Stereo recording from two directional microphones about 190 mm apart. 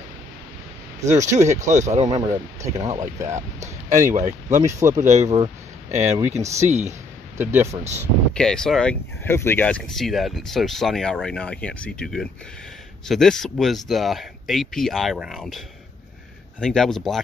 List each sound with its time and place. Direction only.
1.0 s speech: 40° right (ahead or behind)
2.0 s speech: 20° right (ahead or behind)
3.6 s a sound: 15° right (ahead or behind)
4.5 s speech: 15° right (ahead or behind)
5.2 s speech: 30° right (ahead or behind)
5.9 s speech: 15° right (ahead or behind)
6.7 s speech: 35° right (ahead or behind)
7.3 s speech: 15° right (ahead or behind)
8.3 s speech: 5° left (ahead or behind)